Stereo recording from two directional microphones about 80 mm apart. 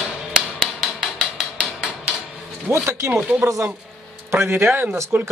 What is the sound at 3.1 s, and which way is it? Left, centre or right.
Speech, centre.